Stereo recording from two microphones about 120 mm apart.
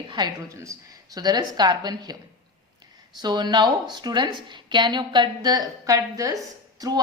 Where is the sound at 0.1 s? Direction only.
40° right (ahead or behind).